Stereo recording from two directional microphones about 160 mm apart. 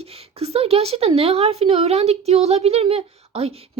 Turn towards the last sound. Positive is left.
turn(degrees=-40)  # may be behind; listen again after turning